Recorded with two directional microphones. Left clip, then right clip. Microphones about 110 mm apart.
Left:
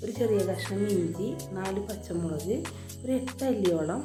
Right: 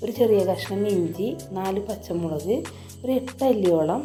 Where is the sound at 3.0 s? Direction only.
25° right (ahead or behind).